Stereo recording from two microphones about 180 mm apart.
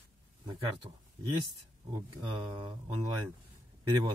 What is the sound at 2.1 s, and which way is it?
Speech, 25° right (ahead or behind).